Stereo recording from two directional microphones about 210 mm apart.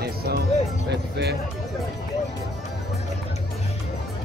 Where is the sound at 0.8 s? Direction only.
55° right (ahead or behind).